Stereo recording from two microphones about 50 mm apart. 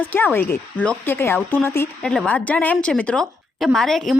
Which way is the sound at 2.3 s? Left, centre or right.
Left.